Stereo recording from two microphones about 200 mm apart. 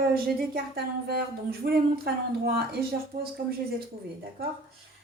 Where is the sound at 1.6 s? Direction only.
50° right (ahead or behind).